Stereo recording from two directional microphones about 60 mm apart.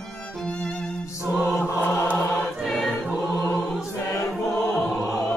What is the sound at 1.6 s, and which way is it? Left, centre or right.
Choir, left.